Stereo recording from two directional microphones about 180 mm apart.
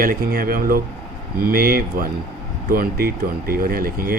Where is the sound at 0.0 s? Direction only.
55° right (ahead or behind).